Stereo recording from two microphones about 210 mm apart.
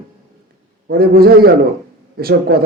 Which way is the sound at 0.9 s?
45° right (ahead or behind).